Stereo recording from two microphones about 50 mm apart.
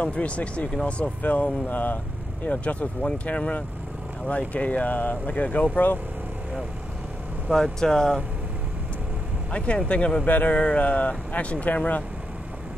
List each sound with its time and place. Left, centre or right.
0.0 s speech: left
7.5 s speech: centre
9.5 s speech: left
10.2 s speech: left
10.5 s speech: left